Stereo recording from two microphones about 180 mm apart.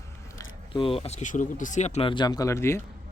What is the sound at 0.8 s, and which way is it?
Speech, 30° left (ahead or behind).